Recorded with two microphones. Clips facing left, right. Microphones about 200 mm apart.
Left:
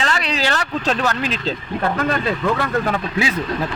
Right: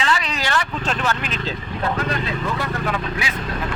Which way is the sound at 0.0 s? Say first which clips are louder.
Left 2 dB; 35° left (ahead or behind).